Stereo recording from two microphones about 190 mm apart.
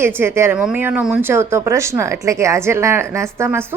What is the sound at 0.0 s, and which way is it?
Speech, 10° right (ahead or behind).